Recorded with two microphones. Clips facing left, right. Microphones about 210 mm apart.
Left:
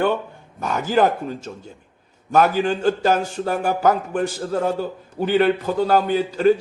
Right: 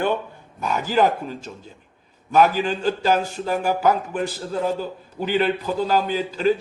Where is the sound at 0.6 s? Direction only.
45° left (ahead or behind).